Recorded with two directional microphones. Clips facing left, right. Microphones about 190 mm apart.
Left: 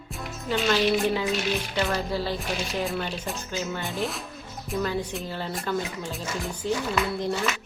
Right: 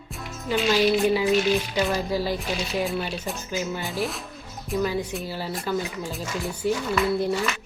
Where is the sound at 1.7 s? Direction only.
10° right (ahead or behind).